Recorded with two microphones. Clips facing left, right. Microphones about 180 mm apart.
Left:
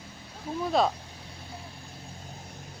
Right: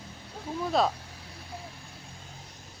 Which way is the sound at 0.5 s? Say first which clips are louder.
Left 1 dB; centre (ahead or behind).